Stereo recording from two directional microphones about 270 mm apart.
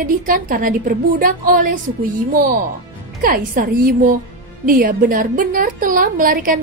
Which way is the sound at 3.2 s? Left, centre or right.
Right.